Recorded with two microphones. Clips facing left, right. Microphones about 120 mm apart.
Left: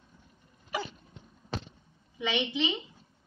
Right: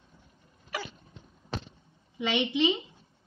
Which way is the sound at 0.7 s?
15° left (ahead or behind).